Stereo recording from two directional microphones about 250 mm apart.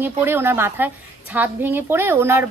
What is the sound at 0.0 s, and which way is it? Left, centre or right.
A woman's voice, centre.